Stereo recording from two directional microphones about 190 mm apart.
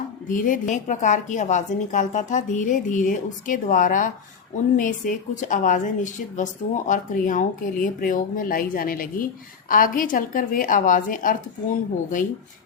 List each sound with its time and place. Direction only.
0.3 s a woman's voice: 45° left (ahead or behind)